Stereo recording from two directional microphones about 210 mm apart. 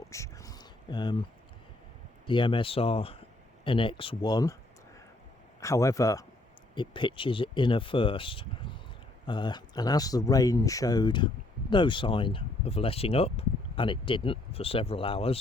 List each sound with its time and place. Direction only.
0.1 s a sound: 15° left (ahead or behind)
2.2 s speech: 25° left (ahead or behind)
5.5 s speech: 15° left (ahead or behind)